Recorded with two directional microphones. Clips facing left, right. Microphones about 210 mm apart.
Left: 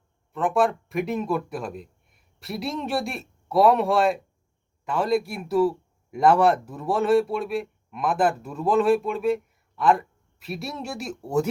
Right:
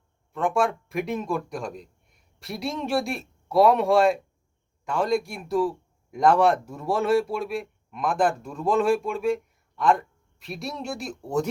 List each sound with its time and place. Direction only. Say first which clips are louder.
0.3 s speech: left 2 dB; centre (ahead or behind)